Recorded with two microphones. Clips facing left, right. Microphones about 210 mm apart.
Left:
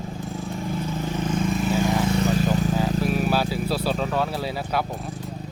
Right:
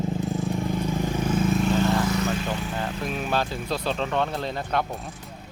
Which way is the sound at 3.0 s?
5° left (ahead or behind).